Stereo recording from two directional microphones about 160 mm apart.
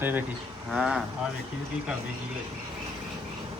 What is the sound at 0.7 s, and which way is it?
Speech, 5° right (ahead or behind).